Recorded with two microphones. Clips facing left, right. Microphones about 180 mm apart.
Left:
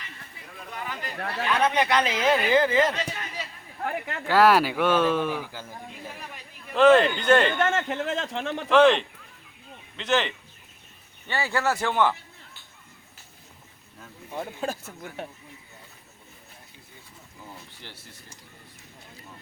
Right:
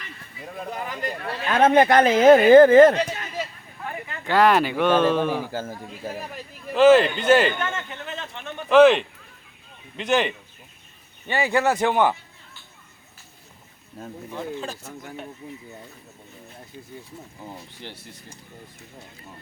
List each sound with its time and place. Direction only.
0.7 s speech: 40° right (ahead or behind)
3.8 s a sound: 70° left (ahead or behind)
4.3 s speech: 5° left (ahead or behind)
5.3 s speech: 45° right (ahead or behind)
6.7 s speech: 5° right (ahead or behind)
7.8 s speech: 90° left
8.7 s a man's voice: 5° right (ahead or behind)
15.4 s speech: 65° right (ahead or behind)
17.4 s speech: 30° right (ahead or behind)